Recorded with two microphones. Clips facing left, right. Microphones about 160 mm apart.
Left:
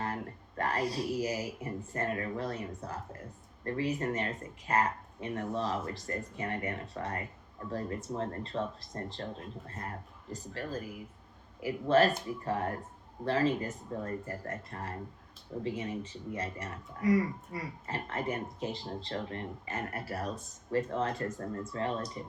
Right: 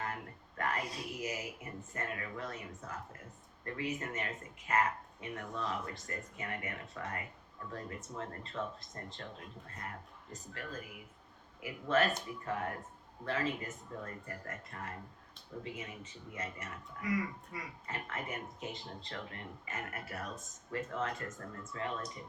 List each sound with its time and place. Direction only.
0.0 s speech: 35° left (ahead or behind)
10.3 s speech: 35° left (ahead or behind)